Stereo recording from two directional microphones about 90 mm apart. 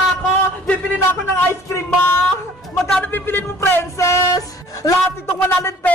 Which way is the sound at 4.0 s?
35° left (ahead or behind).